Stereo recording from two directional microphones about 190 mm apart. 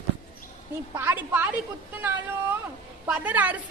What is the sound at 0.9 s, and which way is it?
Speech, 10° right (ahead or behind).